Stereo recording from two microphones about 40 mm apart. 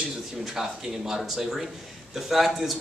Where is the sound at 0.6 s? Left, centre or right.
Centre.